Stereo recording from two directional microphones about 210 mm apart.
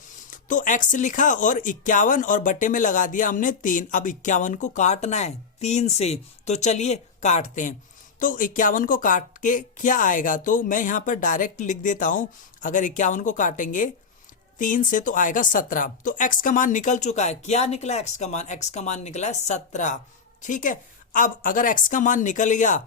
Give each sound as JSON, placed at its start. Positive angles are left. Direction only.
{"t": 0.3, "sound": "speech", "side_deg": 40}